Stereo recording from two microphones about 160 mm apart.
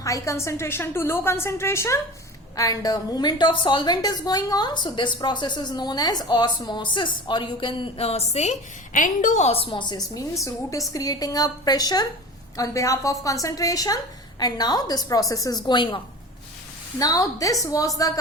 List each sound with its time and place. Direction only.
0.0 s a woman's voice: 20° left (ahead or behind)
17.0 s a woman's voice: 20° left (ahead or behind)